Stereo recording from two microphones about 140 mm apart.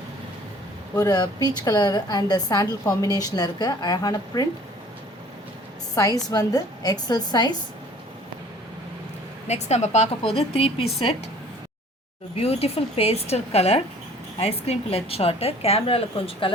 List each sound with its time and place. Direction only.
0.9 s a woman's voice: 25° left (ahead or behind)
5.9 s a woman's voice: 25° left (ahead or behind)
9.5 s a woman's voice: 55° left (ahead or behind)
12.4 s a woman's voice: 45° left (ahead or behind)